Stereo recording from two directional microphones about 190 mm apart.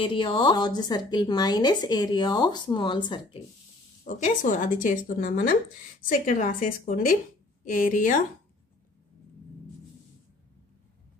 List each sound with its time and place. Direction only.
0.0 s a woman's voice: 25° left (ahead or behind)
4.0 s speech: 45° left (ahead or behind)